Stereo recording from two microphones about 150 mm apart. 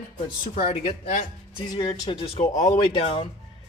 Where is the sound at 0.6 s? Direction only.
45° left (ahead or behind).